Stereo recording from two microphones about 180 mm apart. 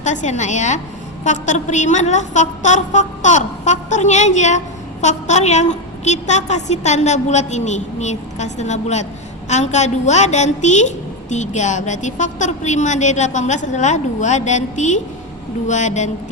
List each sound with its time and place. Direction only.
0.0 s a woman's voice: 40° left (ahead or behind)